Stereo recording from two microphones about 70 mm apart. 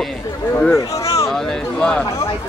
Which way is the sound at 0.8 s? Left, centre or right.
Left.